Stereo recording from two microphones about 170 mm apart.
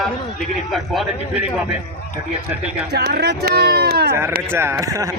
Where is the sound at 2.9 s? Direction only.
70° right (ahead or behind).